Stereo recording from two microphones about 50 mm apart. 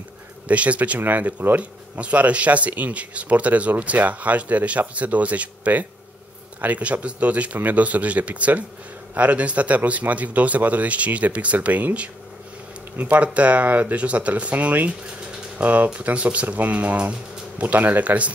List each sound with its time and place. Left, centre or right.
0.5 s speech: right